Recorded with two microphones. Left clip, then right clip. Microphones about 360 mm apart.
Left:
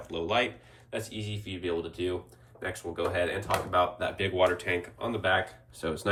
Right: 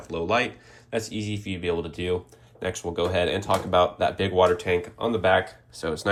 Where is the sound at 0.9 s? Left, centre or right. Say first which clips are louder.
Right 7 dB; right.